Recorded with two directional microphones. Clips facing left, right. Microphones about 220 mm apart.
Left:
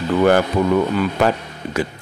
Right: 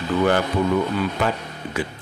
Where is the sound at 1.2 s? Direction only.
40° left (ahead or behind).